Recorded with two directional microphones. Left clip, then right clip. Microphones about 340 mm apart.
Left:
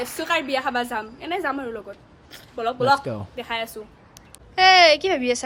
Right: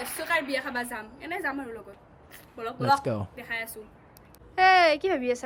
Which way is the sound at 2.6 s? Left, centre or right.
Centre.